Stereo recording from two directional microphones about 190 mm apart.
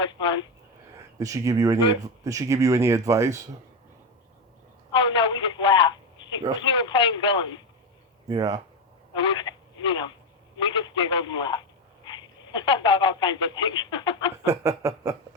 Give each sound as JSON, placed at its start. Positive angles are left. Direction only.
{"t": 0.0, "sound": "a sound", "side_deg": 25}
{"t": 1.2, "sound": "speech", "side_deg": -15}
{"t": 4.9, "sound": "telephone", "side_deg": 25}
{"t": 6.7, "sound": "a man's voice", "side_deg": 25}
{"t": 8.3, "sound": "speech", "side_deg": -20}
{"t": 9.1, "sound": "a man's voice", "side_deg": 25}
{"t": 14.6, "sound": "speech", "side_deg": -15}